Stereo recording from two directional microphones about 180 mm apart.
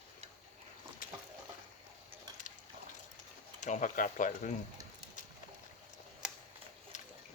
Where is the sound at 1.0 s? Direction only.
50° left (ahead or behind).